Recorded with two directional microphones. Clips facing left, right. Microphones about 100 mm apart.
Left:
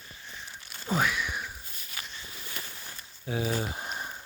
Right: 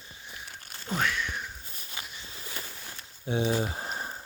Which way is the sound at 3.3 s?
25° right (ahead or behind).